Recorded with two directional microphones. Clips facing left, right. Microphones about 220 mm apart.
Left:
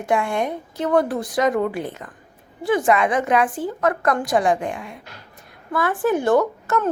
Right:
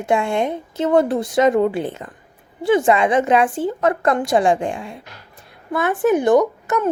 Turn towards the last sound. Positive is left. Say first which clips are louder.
# right 3 dB
turn(degrees=-15)  # may be behind; listen again after turning